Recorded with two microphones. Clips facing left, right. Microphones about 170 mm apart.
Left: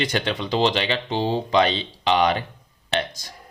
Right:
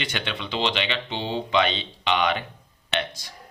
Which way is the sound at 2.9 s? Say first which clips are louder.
Left 3 dB; 40° left (ahead or behind).